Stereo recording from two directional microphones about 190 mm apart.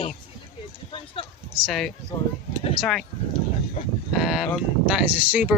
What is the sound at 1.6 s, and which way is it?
Speech, centre (ahead or behind).